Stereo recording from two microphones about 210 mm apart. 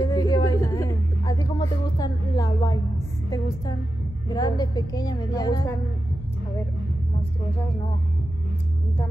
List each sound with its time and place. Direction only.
0.0 s a sound: 15° left (ahead or behind)
3.3 s music: 15° left (ahead or behind)
4.3 s speech: 20° left (ahead or behind)